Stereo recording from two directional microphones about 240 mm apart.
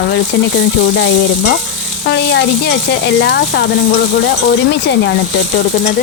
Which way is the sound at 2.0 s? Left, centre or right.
Left.